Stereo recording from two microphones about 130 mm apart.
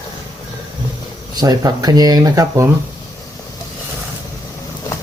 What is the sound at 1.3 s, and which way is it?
Speech, 30° right (ahead or behind).